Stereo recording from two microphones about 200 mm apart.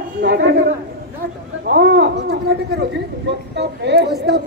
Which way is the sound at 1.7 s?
50° right (ahead or behind).